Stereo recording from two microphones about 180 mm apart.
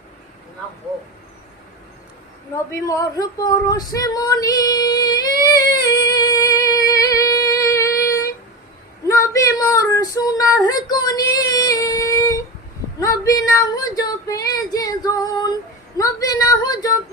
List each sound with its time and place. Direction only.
2.6 s speech: 15° left (ahead or behind)
5.5 s humming: 20° left (ahead or behind)
9.0 s female singing: 20° left (ahead or behind)
16.0 s a sound: 20° left (ahead or behind)